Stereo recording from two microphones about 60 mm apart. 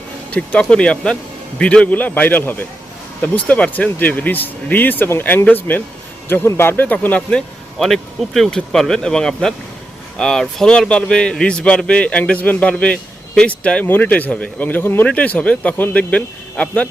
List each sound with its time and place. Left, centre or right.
0.3 s a man's voice: left
6.8 s speech: left
7.3 s a man's voice: centre; by 15.0 s left
15.0 s speech: left